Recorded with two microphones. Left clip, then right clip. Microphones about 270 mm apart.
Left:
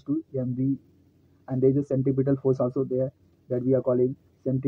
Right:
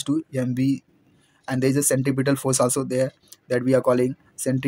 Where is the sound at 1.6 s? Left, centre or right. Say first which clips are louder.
Right 1 dB; right.